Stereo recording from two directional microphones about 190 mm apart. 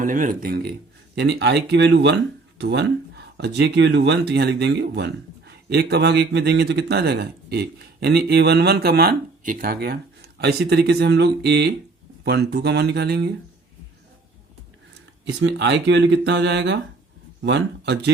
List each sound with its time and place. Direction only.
0.0 s speech: 45° right (ahead or behind); by 13.3 s 60° right (ahead or behind)
15.3 s speech: 70° right (ahead or behind)